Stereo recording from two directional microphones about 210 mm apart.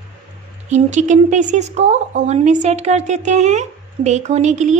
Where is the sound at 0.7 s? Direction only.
35° right (ahead or behind).